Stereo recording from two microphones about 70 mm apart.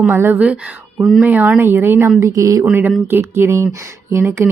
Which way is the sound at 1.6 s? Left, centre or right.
Right.